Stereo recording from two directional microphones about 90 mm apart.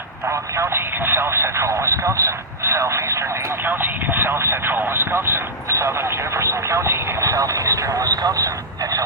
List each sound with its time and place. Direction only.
0.3 s radio: 30° right (ahead or behind)
3.7 s speech: 25° right (ahead or behind); by 8.4 s 45° right (ahead or behind)